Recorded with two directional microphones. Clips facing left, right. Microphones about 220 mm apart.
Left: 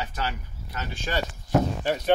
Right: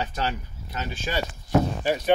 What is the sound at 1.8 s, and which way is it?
Speech, 5° right (ahead or behind).